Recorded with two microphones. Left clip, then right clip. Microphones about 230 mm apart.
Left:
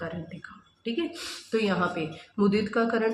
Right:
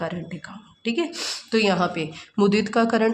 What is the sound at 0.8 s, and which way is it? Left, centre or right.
A woman's voice, right.